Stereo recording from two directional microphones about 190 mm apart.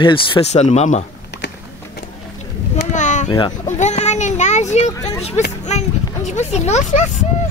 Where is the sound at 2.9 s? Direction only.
40° left (ahead or behind).